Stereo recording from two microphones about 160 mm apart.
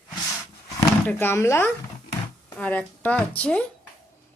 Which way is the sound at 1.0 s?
15° left (ahead or behind).